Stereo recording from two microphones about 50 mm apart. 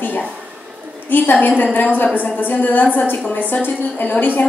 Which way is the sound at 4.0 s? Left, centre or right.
Left.